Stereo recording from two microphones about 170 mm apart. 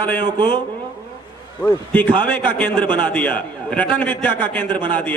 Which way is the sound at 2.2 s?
10° left (ahead or behind).